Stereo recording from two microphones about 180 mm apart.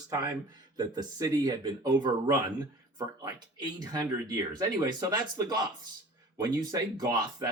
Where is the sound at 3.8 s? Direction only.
20° right (ahead or behind).